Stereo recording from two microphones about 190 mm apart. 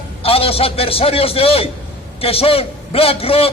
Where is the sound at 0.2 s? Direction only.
30° left (ahead or behind).